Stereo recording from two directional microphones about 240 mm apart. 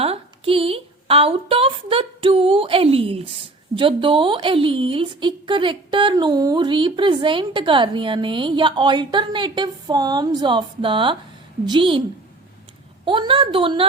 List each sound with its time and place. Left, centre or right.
0.0 s a woman's voice: right
13.1 s a woman's voice: right